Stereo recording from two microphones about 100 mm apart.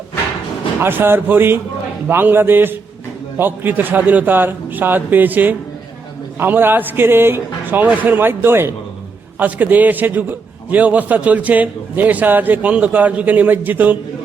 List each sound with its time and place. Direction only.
0.8 s a man's voice: 20° right (ahead or behind)